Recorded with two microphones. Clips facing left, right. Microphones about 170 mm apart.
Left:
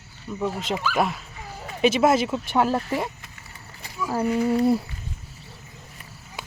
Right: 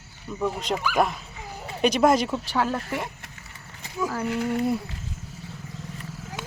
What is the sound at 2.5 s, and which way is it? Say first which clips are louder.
Speech: left 6 dB; 25° left (ahead or behind).